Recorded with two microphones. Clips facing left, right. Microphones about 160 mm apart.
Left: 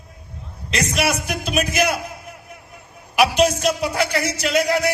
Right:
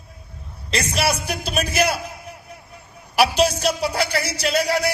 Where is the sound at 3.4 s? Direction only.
35° right (ahead or behind).